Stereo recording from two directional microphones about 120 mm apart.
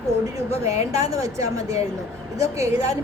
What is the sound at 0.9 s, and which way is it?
A woman's voice, 30° right (ahead or behind).